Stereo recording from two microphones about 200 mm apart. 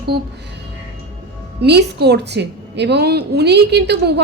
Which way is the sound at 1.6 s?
55° right (ahead or behind).